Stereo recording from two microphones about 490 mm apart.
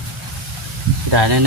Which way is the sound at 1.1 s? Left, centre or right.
Right.